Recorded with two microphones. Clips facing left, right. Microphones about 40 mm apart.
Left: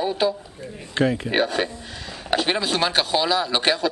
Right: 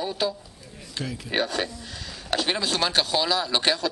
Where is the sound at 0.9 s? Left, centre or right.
Left.